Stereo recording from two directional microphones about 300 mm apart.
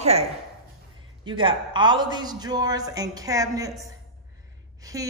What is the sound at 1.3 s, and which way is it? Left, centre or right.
Speech, centre.